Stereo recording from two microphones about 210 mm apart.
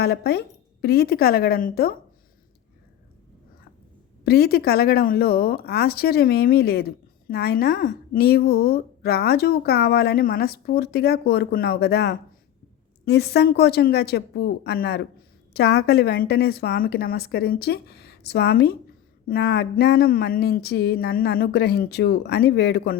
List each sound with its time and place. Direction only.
0.0 s speech: 50° left (ahead or behind)
4.2 s speech: 50° left (ahead or behind)